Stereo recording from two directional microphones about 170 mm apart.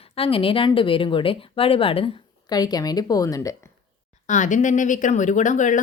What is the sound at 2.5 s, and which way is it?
A woman's voice, 20° left (ahead or behind).